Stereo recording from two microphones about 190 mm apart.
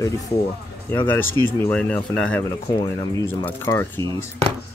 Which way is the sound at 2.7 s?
25° left (ahead or behind).